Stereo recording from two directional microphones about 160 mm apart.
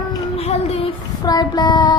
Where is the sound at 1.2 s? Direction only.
25° left (ahead or behind).